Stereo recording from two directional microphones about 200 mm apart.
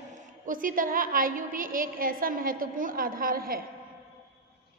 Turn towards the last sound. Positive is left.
turn(degrees=-45)  # may be behind; listen again after turning